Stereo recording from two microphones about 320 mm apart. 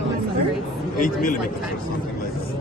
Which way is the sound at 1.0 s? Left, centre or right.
Left.